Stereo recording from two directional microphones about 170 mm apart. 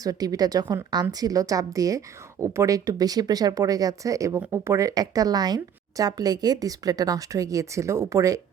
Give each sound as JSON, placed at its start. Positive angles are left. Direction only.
{"t": 0.0, "sound": "speech", "side_deg": -20}